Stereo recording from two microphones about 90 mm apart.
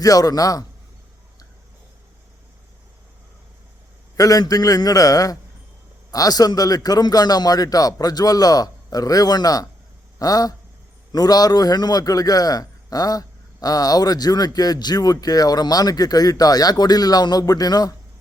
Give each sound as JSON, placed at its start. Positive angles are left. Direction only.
{"t": 0.0, "sound": "a man's voice", "side_deg": 40}
{"t": 4.2, "sound": "a man's voice", "side_deg": 45}